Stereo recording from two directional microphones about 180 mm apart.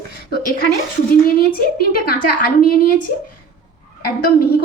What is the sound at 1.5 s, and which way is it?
A woman's voice, 55° left (ahead or behind).